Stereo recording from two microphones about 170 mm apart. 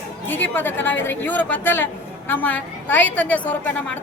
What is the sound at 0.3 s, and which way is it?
A woman's voice, 10° left (ahead or behind).